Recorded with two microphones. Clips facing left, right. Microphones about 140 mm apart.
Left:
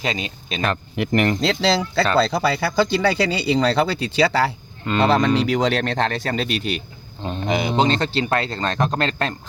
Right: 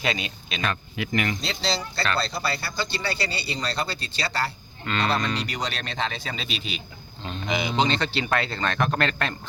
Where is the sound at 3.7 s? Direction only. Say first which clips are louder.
Left 11 dB; 90° left.